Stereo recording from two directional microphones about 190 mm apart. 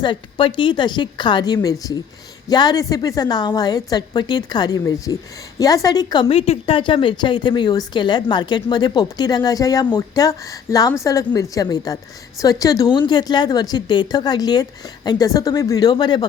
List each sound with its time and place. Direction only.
0.0 s speech: 25° left (ahead or behind)